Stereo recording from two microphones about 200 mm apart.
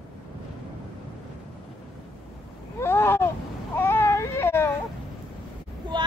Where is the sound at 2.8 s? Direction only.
10° left (ahead or behind).